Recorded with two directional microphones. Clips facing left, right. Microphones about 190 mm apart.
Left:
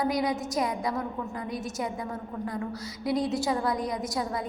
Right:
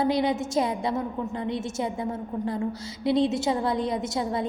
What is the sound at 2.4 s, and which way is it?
A woman's voice, 25° right (ahead or behind).